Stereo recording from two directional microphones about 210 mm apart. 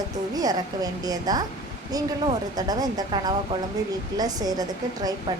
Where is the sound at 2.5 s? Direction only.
20° right (ahead or behind).